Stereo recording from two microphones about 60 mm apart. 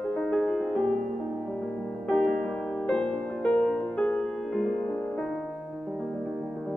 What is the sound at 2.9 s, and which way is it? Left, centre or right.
Music, centre.